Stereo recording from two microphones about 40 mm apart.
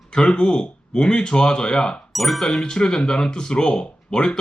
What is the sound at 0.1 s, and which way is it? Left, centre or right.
Speech, centre.